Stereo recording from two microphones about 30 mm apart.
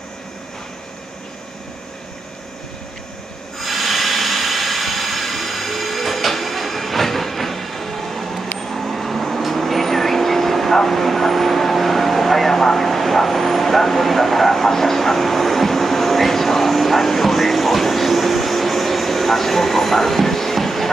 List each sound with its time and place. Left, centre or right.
3.5 s hiss: centre